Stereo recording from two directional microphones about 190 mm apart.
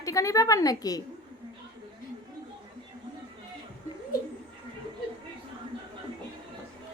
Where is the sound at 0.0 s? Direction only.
15° left (ahead or behind).